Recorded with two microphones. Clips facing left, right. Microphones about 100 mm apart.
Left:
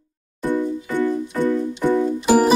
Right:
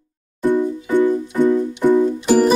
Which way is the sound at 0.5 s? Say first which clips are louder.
Right 4 dB; 20° right (ahead or behind).